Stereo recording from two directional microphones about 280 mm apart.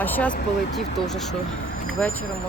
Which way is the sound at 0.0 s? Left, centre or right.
Centre.